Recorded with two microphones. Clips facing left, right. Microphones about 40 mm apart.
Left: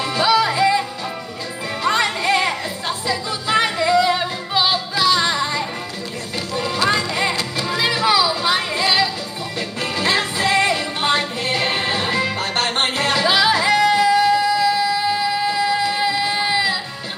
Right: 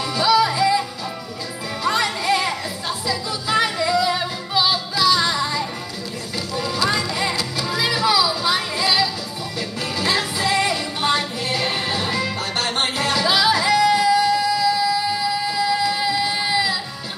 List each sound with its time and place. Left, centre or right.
0.0 s music: centre